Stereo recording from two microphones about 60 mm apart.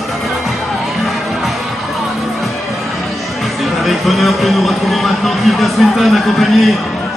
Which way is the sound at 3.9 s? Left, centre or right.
Centre.